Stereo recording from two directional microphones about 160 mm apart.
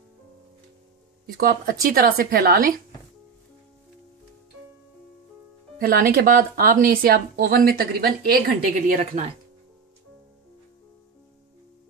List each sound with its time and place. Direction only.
1.2 s a woman's voice: 70° right (ahead or behind)
5.8 s speech: 65° right (ahead or behind); by 9.3 s 45° right (ahead or behind)